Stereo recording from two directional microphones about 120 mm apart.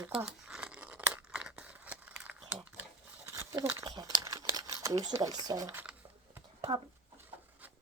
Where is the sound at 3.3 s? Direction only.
30° right (ahead or behind).